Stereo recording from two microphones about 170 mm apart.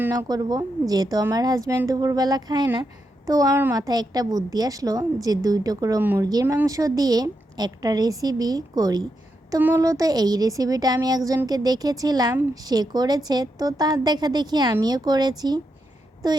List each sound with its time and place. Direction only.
0.0 s a woman's voice: 20° right (ahead or behind)